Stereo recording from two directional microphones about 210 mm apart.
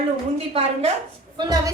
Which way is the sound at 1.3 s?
15° right (ahead or behind).